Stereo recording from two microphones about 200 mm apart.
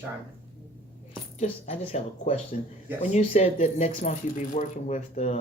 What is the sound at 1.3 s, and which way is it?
Speech, 30° left (ahead or behind).